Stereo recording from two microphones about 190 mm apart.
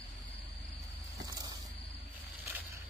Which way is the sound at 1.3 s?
20° right (ahead or behind).